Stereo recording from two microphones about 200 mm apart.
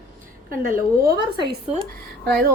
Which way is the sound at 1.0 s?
55° right (ahead or behind).